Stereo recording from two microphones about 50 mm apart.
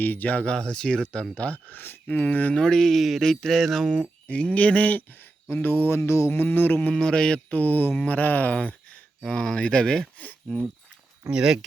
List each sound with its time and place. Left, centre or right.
0.0 s speech: left
0.4 s speech: centre
1.4 s speech: left
2.0 s speech: left
2.6 s speech: centre
4.3 s speech: left
6.3 s speech: left
6.9 s mantra: centre; by 7.9 s left
7.9 s speech: left
9.2 s speech: centre
11.3 s speech: centre